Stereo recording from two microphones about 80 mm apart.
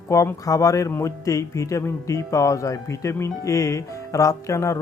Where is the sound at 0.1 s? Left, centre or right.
Left.